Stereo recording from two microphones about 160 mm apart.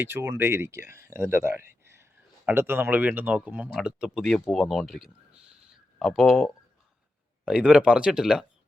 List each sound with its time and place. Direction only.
0.0 s speech: 15° right (ahead or behind)